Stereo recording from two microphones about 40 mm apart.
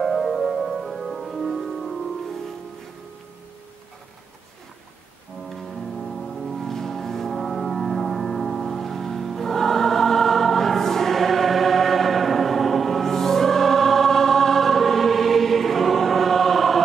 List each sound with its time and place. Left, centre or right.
0.0 s music: centre
6.0 s music: centre